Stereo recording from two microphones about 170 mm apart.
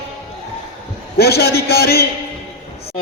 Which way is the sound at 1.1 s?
70° left (ahead or behind).